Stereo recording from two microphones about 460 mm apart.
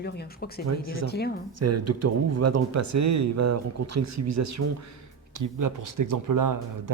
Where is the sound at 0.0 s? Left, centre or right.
Centre.